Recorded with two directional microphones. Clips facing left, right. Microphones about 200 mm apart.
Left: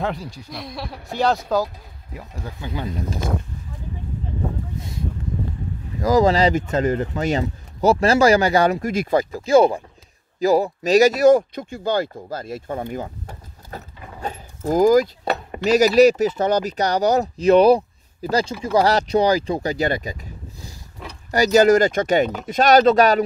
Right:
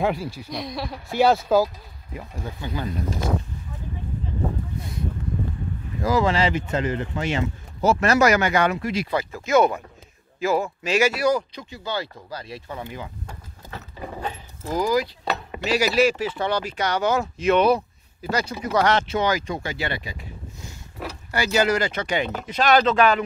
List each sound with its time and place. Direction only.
0.0 s speech: 5° right (ahead or behind)
6.0 s speech: 40° left (ahead or behind)